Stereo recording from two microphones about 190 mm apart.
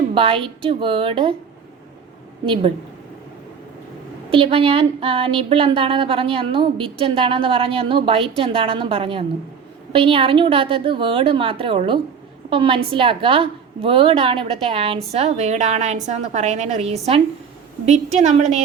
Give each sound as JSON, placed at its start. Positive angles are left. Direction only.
{"t": 0.1, "sound": "a woman's voice", "side_deg": -30}
{"t": 2.5, "sound": "speech", "side_deg": -30}
{"t": 4.3, "sound": "a woman's voice", "side_deg": -30}